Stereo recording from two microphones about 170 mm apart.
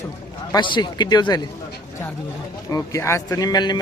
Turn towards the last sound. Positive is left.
turn(degrees=25)  # may be behind; listen again after turning